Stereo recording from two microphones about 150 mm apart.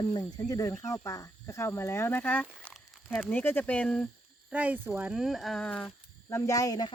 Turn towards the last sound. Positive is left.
turn(degrees=25)  # may be behind; listen again after turning